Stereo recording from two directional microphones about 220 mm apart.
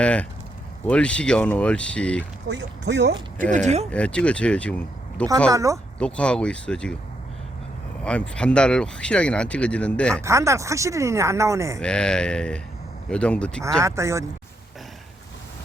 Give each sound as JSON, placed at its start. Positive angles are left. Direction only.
{"t": 0.0, "sound": "speech", "side_deg": 5}
{"t": 2.5, "sound": "speech", "side_deg": -55}
{"t": 3.9, "sound": "speech", "side_deg": 5}
{"t": 5.5, "sound": "speech", "side_deg": -15}
{"t": 6.0, "sound": "speech", "side_deg": 5}
{"t": 8.0, "sound": "speech", "side_deg": 5}
{"t": 10.2, "sound": "speech", "side_deg": -15}
{"t": 11.8, "sound": "speech", "side_deg": 5}
{"t": 13.8, "sound": "speech", "side_deg": -15}